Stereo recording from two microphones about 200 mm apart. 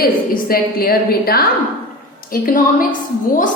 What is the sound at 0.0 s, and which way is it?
A woman's voice, 45° left (ahead or behind).